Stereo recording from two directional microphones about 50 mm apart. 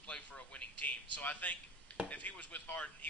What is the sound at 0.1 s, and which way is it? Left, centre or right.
A man's voice, left.